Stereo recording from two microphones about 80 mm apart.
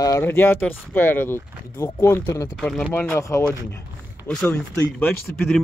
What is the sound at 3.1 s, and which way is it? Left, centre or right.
Speech, left.